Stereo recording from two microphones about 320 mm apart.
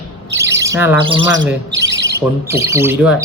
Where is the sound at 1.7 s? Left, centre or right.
Right.